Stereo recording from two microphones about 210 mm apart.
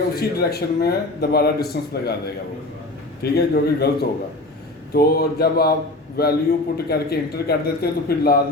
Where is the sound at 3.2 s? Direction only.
50° left (ahead or behind).